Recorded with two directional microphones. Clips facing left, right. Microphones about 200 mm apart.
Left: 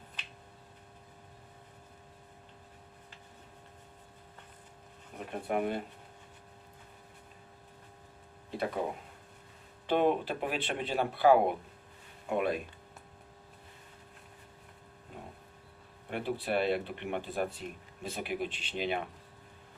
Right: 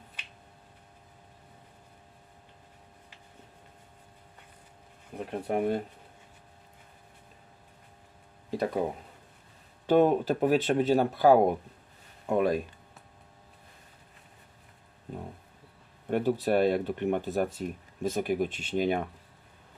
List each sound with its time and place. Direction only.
5.5 s speech: 35° right (ahead or behind)
8.4 s speech: 40° right (ahead or behind)
9.8 s speech: 45° right (ahead or behind)
16.0 s speech: 45° right (ahead or behind)